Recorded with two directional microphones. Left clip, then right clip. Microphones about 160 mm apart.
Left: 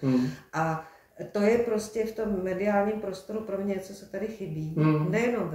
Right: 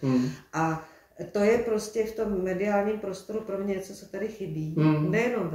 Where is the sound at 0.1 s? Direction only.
20° left (ahead or behind).